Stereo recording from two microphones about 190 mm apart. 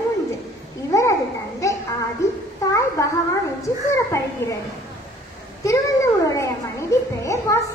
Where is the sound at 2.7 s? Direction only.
15° left (ahead or behind).